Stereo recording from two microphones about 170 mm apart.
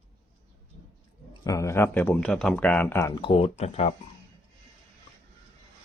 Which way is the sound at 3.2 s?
35° left (ahead or behind).